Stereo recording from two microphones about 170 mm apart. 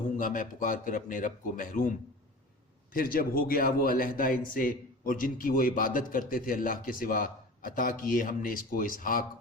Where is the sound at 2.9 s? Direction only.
55° left (ahead or behind).